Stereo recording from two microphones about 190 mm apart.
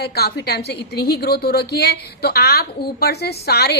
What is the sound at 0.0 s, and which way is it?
A woman's voice, 60° left (ahead or behind).